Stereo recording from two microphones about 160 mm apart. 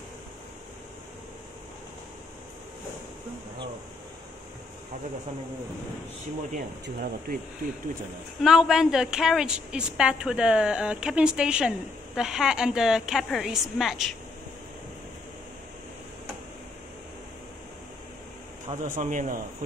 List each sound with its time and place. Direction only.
6.5 s speech: 60° right (ahead or behind)
8.4 s a woman's voice: 5° right (ahead or behind)
18.8 s speech: 55° right (ahead or behind)